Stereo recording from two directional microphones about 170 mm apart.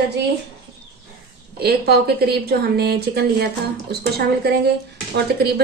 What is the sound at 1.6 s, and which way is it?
A woman's voice, 70° right (ahead or behind).